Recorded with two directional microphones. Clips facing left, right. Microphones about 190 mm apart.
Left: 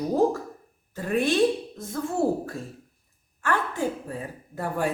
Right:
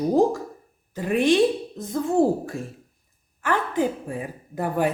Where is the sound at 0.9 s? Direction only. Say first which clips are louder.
Right 5 dB; 15° right (ahead or behind).